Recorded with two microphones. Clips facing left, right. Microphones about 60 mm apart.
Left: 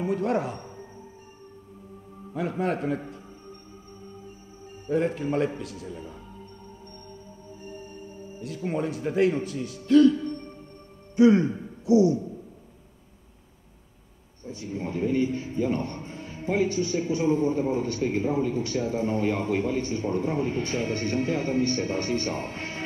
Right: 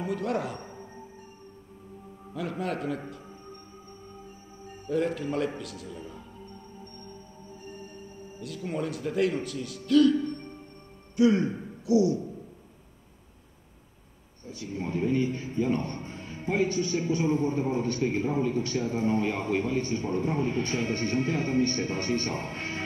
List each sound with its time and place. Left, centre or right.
0.0 s speech: left
2.3 s a man's voice: left
4.8 s a man's voice: left
8.4 s a man's voice: left
11.1 s speech: left
14.8 s a man's voice: right
22.4 s music: right